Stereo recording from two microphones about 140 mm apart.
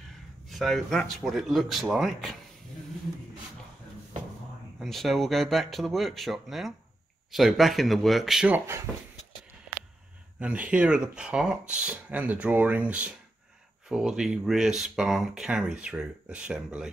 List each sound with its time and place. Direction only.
0.5 s speech: centre (ahead or behind)
4.7 s speech: centre (ahead or behind)
8.5 s speech: 15° right (ahead or behind)
10.4 s speech: 10° right (ahead or behind)